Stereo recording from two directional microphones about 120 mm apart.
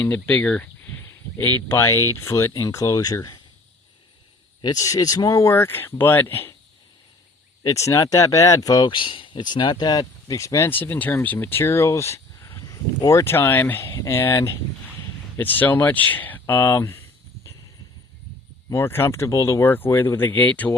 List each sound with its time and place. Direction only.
0.0 s speech: 10° left (ahead or behind); by 3.4 s 30° left (ahead or behind)
4.6 s speech: 30° left (ahead or behind)
7.6 s speech: 25° left (ahead or behind)
18.7 s speech: 20° left (ahead or behind)